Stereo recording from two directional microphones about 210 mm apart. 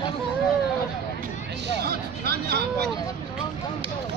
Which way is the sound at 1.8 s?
50° right (ahead or behind).